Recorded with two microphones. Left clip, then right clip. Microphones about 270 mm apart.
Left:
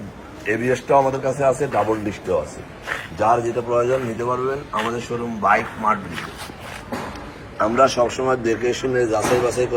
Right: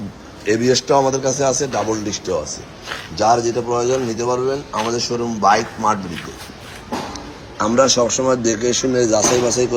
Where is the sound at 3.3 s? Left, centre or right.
Centre.